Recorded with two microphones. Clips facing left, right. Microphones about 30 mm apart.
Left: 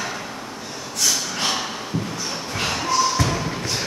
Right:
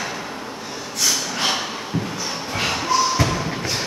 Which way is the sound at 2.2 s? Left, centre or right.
Centre.